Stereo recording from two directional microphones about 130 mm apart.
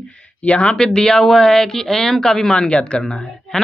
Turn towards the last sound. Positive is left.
turn(degrees=0)  # may be behind; listen again after turning